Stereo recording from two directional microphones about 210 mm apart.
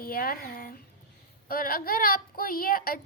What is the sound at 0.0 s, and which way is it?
A woman's voice, 45° left (ahead or behind).